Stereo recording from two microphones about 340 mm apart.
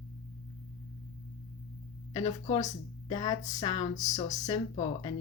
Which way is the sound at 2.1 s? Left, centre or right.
Centre.